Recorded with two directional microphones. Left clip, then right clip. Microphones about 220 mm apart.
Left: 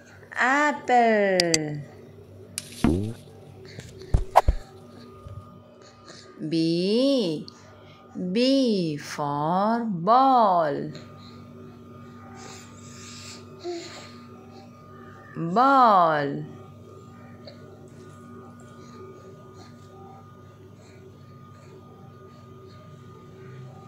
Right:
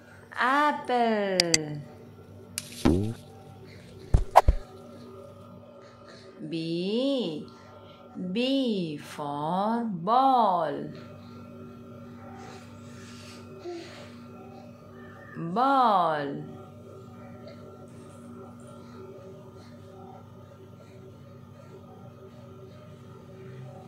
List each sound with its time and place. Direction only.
0.3 s a woman's voice: 15° left (ahead or behind)
1.3 s speech: centre (ahead or behind)
2.5 s music: centre (ahead or behind)
4.1 s a sound: centre (ahead or behind)
6.5 s a woman's voice: 30° left (ahead or behind)
15.3 s a woman's voice: 20° left (ahead or behind)